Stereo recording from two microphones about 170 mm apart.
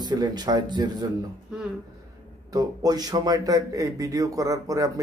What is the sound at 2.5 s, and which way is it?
Speech, 20° right (ahead or behind).